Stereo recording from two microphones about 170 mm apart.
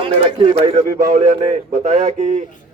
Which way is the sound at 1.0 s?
40° right (ahead or behind).